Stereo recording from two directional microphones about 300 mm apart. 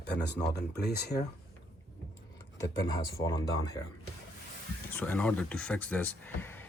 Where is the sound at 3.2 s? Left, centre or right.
Centre.